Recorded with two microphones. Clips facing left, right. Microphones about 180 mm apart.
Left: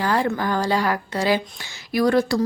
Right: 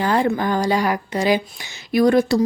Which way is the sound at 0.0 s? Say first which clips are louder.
Right 3 dB; 20° right (ahead or behind).